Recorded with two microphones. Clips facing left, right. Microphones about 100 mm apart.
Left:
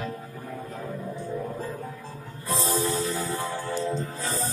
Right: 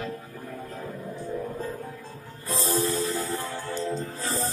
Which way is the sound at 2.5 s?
20° left (ahead or behind).